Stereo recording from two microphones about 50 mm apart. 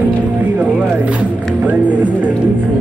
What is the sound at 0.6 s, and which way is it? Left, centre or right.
Music, right.